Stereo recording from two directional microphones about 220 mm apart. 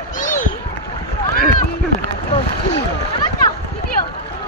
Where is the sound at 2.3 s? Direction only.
25° left (ahead or behind).